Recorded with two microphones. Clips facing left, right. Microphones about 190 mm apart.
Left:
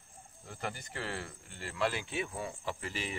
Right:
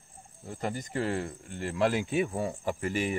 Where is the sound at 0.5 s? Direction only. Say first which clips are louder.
Right 7 dB; 40° right (ahead or behind).